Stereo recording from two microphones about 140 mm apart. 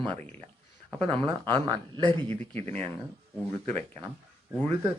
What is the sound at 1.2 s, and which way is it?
Speech, 30° right (ahead or behind).